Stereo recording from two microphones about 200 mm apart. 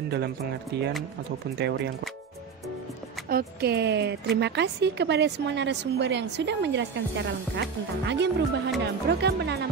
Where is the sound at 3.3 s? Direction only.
50° right (ahead or behind).